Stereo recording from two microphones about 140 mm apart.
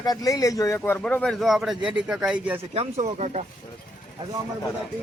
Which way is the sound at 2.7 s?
50° right (ahead or behind).